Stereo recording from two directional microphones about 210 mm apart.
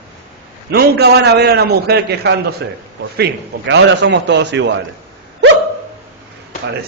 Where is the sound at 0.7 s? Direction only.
50° right (ahead or behind).